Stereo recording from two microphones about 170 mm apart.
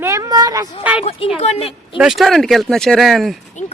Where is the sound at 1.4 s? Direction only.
40° left (ahead or behind).